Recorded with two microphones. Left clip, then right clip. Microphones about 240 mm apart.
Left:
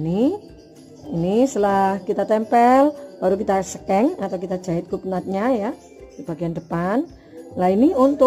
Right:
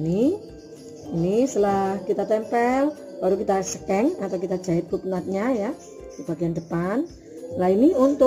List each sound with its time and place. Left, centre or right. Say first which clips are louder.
0.0 s a woman's voice: left 1 dB; left
3.4 s a woman's voice: left 3 dB; left